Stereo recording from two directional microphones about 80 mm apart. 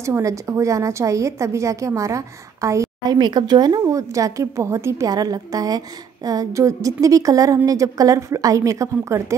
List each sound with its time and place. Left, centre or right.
0.0 s a woman's voice: right
3.1 s speech: right
3.8 s a woman's voice: right
5.0 s a woman's voice: right